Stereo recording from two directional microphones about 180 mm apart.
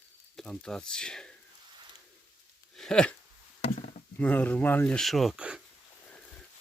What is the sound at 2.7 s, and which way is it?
Speech, 5° left (ahead or behind).